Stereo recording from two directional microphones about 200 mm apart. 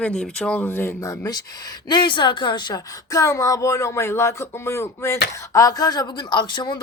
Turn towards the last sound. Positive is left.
turn(degrees=20)  # may be behind; listen again after turning